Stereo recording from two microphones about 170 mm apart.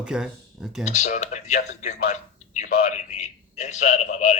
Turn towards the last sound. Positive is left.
turn(degrees=40)  # may be behind; listen again after turning